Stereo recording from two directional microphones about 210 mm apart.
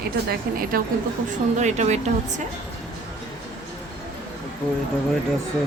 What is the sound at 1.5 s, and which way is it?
Speech, 35° right (ahead or behind).